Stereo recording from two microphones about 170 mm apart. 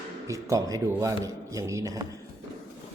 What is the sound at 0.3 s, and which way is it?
A man's voice, 20° right (ahead or behind).